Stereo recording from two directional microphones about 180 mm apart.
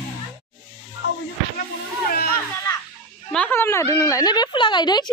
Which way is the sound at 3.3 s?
10° left (ahead or behind).